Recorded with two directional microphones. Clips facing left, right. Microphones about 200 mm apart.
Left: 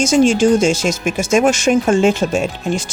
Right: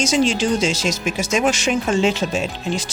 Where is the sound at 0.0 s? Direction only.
50° left (ahead or behind).